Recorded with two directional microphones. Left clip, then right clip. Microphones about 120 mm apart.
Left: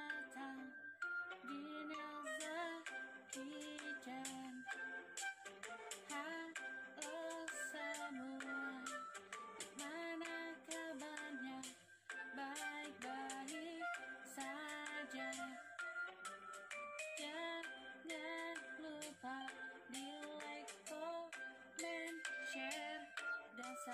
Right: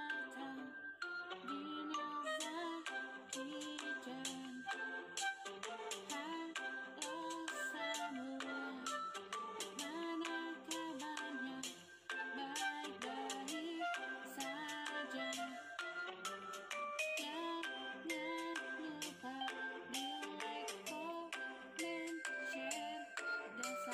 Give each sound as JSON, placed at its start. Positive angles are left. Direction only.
{"t": 1.0, "sound": "music", "side_deg": -25}
{"t": 6.5, "sound": "music", "side_deg": -20}
{"t": 12.5, "sound": "music", "side_deg": -30}
{"t": 18.1, "sound": "music", "side_deg": 25}
{"t": 19.4, "sound": "music", "side_deg": -35}
{"t": 22.0, "sound": "music", "side_deg": -55}